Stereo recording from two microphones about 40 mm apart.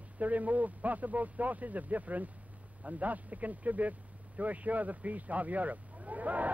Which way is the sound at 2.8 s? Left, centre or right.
Right.